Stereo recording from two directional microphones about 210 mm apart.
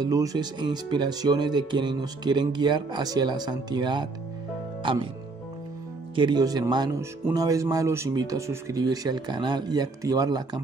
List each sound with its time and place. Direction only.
0.0 s speech: 15° right (ahead or behind)
6.1 s speech: 20° right (ahead or behind)